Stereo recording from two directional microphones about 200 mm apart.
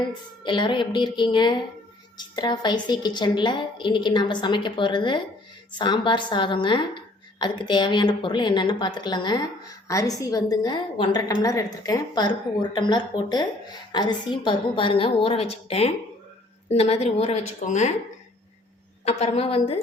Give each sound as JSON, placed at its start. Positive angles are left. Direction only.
{"t": 0.0, "sound": "a woman's voice", "side_deg": 25}
{"t": 19.0, "sound": "a woman's voice", "side_deg": 30}